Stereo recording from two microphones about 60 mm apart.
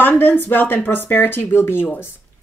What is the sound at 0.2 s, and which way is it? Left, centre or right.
Speech, left.